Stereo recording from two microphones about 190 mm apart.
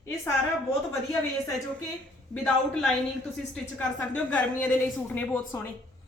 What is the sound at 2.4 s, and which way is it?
A woman's voice, 5° left (ahead or behind).